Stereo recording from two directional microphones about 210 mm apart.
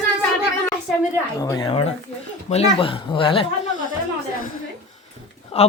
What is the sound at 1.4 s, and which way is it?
A man's voice, 20° left (ahead or behind).